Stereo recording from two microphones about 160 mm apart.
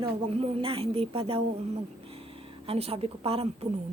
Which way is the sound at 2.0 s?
35° right (ahead or behind).